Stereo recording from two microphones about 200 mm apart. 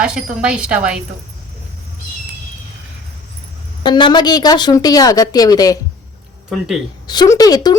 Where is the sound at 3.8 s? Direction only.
20° left (ahead or behind).